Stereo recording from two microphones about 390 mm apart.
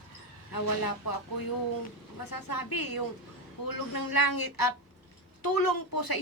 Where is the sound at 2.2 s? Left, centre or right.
Left.